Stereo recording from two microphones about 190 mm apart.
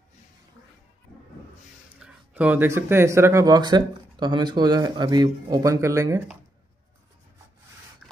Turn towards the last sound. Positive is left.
turn(degrees=-15)  # may be behind; listen again after turning